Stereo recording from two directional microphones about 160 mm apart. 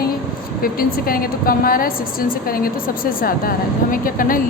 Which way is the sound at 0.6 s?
65° left (ahead or behind).